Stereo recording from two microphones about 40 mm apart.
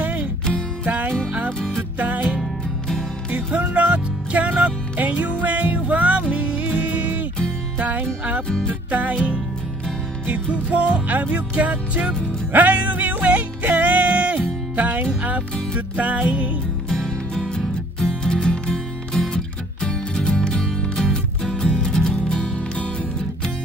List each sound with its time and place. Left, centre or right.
0.0 s music: right
2.0 s music: right
10.5 s music: right
16.9 s music: centre